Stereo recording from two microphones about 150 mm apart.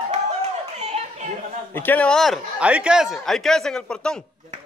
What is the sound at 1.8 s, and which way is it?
Speech, 10° left (ahead or behind).